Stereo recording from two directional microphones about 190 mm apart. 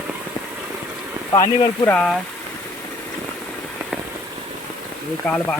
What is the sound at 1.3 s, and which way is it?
Speech, 25° left (ahead or behind).